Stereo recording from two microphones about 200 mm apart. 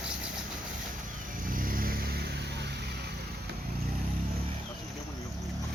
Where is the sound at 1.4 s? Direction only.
45° right (ahead or behind).